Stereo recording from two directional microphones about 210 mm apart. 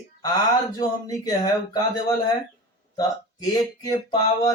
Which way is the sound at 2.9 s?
20° left (ahead or behind).